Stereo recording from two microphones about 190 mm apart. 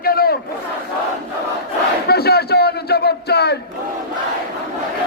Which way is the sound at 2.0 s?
55° left (ahead or behind).